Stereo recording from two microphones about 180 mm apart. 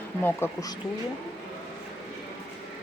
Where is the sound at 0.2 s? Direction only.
10° left (ahead or behind).